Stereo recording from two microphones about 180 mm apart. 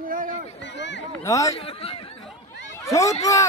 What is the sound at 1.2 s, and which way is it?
Speech, 15° left (ahead or behind).